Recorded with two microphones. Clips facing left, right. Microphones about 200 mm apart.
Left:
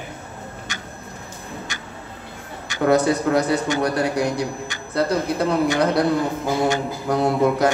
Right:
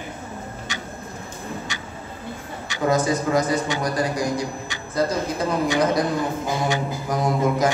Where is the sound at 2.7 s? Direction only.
65° left (ahead or behind).